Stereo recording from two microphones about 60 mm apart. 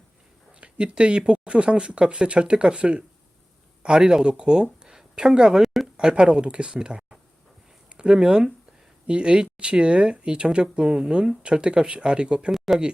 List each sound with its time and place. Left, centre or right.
0.5 s speech: centre
12.5 s speech: centre